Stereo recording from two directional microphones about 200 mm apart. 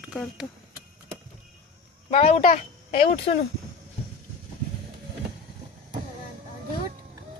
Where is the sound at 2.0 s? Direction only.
30° left (ahead or behind).